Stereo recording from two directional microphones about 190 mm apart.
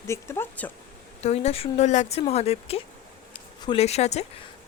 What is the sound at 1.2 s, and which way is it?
A woman's voice, 35° left (ahead or behind).